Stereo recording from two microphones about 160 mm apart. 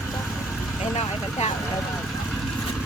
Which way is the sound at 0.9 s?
45° left (ahead or behind).